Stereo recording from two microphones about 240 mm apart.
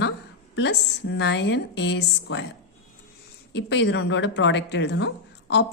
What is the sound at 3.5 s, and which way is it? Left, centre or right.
A woman's voice, left.